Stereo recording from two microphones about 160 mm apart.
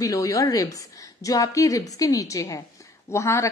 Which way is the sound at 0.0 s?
20° left (ahead or behind).